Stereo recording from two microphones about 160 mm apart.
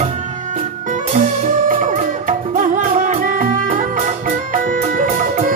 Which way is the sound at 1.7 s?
55° right (ahead or behind).